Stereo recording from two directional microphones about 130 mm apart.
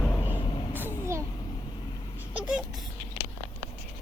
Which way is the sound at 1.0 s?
20° right (ahead or behind).